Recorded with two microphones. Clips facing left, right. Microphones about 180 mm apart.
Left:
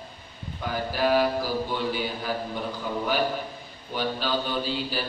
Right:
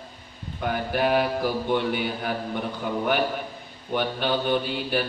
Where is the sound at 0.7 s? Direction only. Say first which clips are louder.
Right 1 dB; 60° right (ahead or behind).